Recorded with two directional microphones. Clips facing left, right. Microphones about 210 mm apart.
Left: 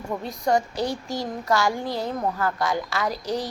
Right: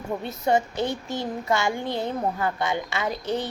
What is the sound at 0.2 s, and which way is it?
A woman's voice, 5° right (ahead or behind).